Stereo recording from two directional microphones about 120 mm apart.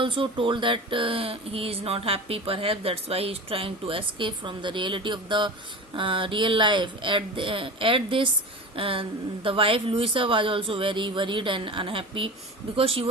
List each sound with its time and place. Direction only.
0.0 s speech: 45° right (ahead or behind)